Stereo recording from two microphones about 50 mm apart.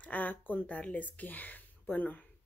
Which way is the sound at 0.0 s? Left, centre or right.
Left.